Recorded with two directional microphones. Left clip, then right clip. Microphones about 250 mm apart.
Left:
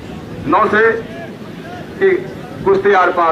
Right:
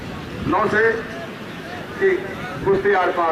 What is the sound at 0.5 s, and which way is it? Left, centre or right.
Speech, centre.